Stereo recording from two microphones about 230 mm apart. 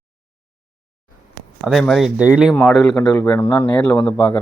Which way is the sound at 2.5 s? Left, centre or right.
Centre.